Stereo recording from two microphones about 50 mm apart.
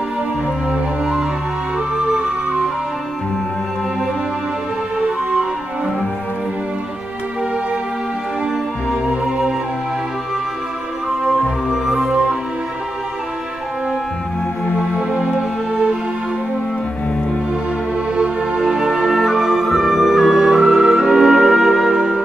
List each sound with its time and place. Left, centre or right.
0.7 s music: centre
9.0 s music: right
11.7 s music: centre
15.0 s music: centre
17.9 s music: centre
18.6 s music: centre